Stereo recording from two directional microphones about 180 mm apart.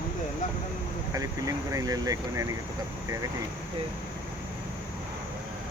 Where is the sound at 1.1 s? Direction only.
20° right (ahead or behind).